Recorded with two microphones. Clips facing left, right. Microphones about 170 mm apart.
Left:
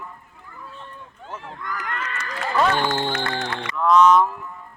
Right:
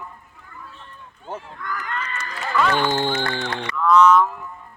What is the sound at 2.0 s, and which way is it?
Run, 85° left.